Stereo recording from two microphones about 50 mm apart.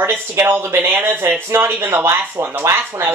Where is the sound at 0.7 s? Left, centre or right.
Right.